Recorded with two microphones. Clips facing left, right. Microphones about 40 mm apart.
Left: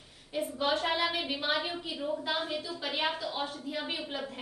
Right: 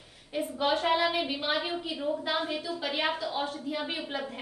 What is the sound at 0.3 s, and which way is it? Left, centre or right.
A woman's voice, centre.